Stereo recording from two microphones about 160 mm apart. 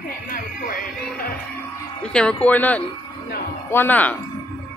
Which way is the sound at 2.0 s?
5° left (ahead or behind).